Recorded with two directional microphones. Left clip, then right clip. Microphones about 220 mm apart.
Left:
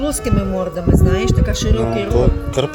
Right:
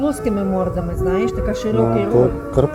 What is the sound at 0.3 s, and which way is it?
Speech, 75° left (ahead or behind).